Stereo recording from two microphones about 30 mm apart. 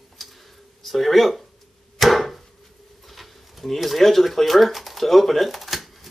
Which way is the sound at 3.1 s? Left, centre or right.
Centre.